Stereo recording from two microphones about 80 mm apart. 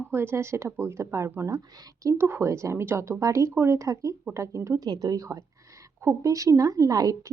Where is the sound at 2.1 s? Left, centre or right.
Right.